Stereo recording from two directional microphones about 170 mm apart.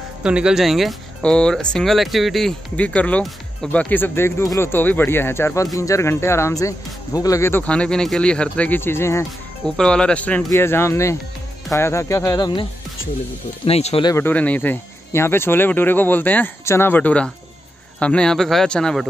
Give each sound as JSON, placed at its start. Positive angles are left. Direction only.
{"t": 0.2, "sound": "speech", "side_deg": -5}
{"t": 13.7, "sound": "speech", "side_deg": 35}
{"t": 14.0, "sound": "speech", "side_deg": 15}